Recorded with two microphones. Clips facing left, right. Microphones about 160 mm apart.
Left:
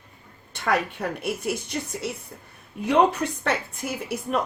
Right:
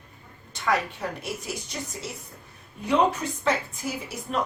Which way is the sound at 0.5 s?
60° left (ahead or behind).